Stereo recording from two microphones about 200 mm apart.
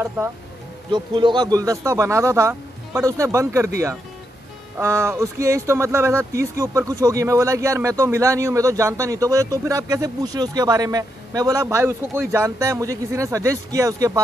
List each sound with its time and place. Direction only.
0.9 s speech: 20° right (ahead or behind)
4.7 s speech: 15° right (ahead or behind)